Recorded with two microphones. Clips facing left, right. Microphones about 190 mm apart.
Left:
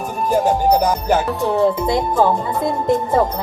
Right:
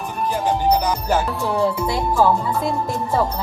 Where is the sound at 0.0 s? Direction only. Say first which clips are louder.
Left 5 dB; 45° left (ahead or behind).